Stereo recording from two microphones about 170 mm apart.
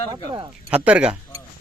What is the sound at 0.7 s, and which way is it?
Speech, 5° right (ahead or behind).